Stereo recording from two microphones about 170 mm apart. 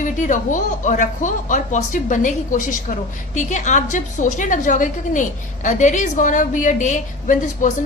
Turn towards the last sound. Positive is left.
turn(degrees=50)  # may be behind; listen again after turning